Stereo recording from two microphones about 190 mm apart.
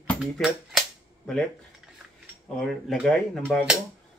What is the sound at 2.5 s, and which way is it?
Speech, centre (ahead or behind).